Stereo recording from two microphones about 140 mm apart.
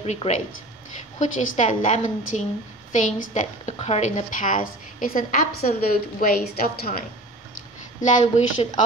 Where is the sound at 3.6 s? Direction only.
45° left (ahead or behind).